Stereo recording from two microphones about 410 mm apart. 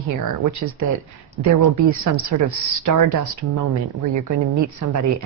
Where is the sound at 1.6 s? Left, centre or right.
Right.